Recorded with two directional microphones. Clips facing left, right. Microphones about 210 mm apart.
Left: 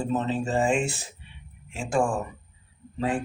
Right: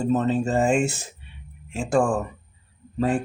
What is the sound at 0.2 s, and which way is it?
Speech, 45° right (ahead or behind).